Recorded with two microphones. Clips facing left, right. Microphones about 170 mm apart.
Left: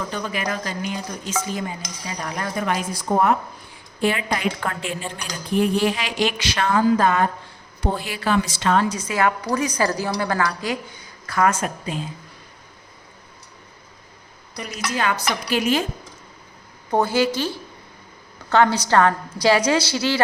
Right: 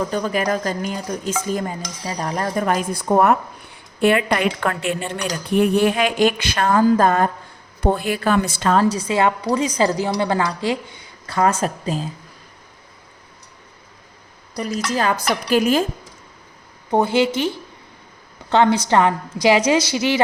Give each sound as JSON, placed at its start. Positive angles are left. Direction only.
{"t": 0.1, "sound": "dishes", "side_deg": -40}
{"t": 3.1, "sound": "a woman's voice", "side_deg": -65}
{"t": 7.8, "sound": "dishes", "side_deg": -55}
{"t": 8.7, "sound": "speech", "side_deg": -35}
{"t": 14.5, "sound": "dishes", "side_deg": -40}
{"t": 16.9, "sound": "speech", "side_deg": -25}